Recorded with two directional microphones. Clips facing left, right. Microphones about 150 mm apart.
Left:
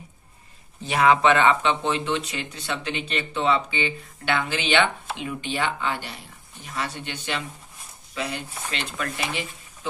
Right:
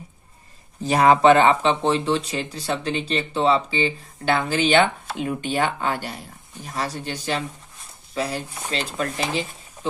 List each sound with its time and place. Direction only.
0.8 s speech: 40° right (ahead or behind)